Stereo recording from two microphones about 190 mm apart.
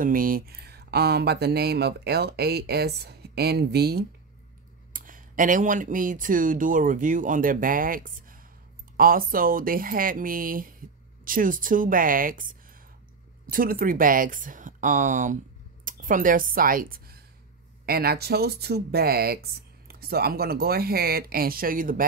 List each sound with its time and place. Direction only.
0.0 s speech: 45° right (ahead or behind)
4.9 s speech: 45° right (ahead or behind)